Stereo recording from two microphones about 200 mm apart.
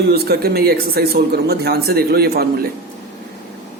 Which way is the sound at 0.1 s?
50° right (ahead or behind).